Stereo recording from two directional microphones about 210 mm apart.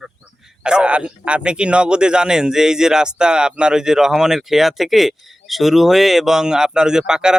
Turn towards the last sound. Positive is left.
turn(degrees=-5)  # may be behind; listen again after turning